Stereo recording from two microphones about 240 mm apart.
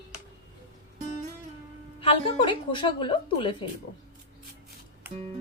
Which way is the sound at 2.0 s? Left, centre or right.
Left.